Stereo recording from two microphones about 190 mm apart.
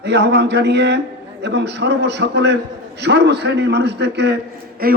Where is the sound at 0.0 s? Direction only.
65° right (ahead or behind).